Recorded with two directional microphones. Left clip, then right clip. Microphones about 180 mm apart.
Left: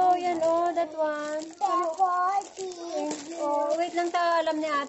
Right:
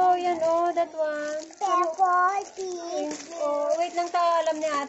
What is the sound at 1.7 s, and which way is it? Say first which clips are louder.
Child singing: right 3 dB; 15° right (ahead or behind).